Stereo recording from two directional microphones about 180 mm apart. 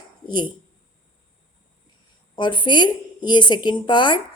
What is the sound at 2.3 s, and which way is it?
A woman's voice, 25° left (ahead or behind).